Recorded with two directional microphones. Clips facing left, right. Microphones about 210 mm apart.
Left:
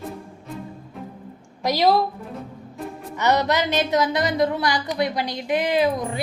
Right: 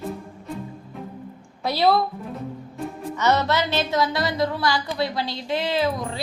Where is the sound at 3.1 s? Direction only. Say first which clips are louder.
Left 1 dB; 15° left (ahead or behind).